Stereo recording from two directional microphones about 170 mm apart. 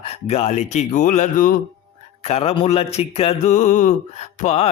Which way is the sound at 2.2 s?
40° left (ahead or behind).